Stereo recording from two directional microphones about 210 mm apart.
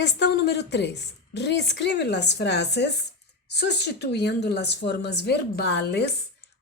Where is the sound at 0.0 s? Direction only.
55° left (ahead or behind).